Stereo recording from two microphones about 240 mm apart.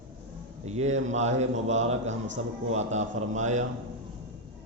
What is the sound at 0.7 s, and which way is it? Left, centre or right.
A man's voice, right.